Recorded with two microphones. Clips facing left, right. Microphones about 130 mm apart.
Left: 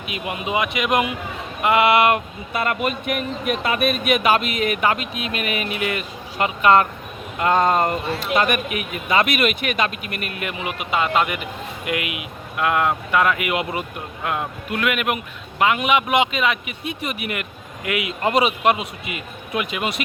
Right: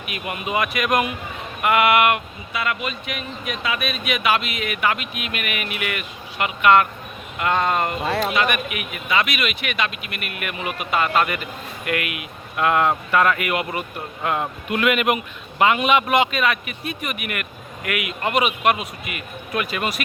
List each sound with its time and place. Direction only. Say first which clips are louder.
0.0 s a man's voice: left 2 dB; 20° left (ahead or behind)
2.5 s speech: left 3 dB; 45° left (ahead or behind)
10.6 s a man's voice: even; 20° left (ahead or behind)
12.5 s a man's voice: right 1 dB; centre (ahead or behind); by 13.8 s 20° left (ahead or behind)
14.3 s a man's voice: right 2 dB; centre (ahead or behind); by 20.0 s 15° left (ahead or behind)